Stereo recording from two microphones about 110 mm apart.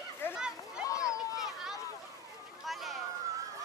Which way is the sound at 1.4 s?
5° right (ahead or behind).